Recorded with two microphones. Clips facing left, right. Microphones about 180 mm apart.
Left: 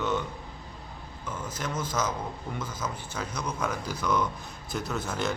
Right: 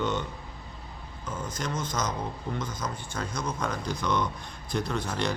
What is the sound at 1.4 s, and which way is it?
A man's voice, 5° left (ahead or behind).